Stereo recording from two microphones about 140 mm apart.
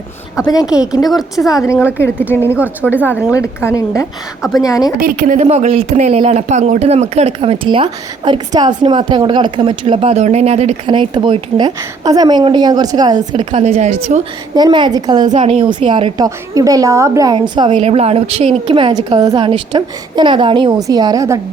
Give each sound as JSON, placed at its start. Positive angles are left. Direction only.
{"t": 0.9, "sound": "a woman's voice", "side_deg": 25}
{"t": 3.3, "sound": "a woman's voice", "side_deg": 20}
{"t": 4.9, "sound": "a woman's voice", "side_deg": -80}
{"t": 5.4, "sound": "speech", "side_deg": -50}
{"t": 10.9, "sound": "a woman's voice", "side_deg": -35}
{"t": 11.6, "sound": "a woman's voice", "side_deg": -25}
{"t": 14.5, "sound": "a woman's voice", "side_deg": -30}
{"t": 15.3, "sound": "a woman's voice", "side_deg": -50}
{"t": 16.2, "sound": "a woman's voice", "side_deg": -25}
{"t": 17.7, "sound": "speech", "side_deg": -50}
{"t": 19.2, "sound": "a woman's voice", "side_deg": -25}